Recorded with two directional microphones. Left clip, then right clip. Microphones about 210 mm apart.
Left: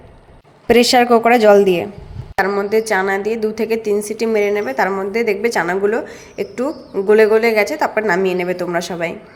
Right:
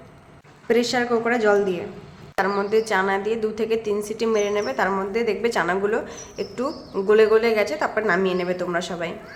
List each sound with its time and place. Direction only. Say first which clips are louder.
0.7 s a woman's voice: left 9 dB; 35° left (ahead or behind)
2.4 s a woman's voice: left 5 dB; 20° left (ahead or behind)